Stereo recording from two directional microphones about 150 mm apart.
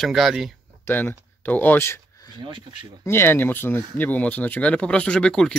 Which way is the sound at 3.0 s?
15° left (ahead or behind).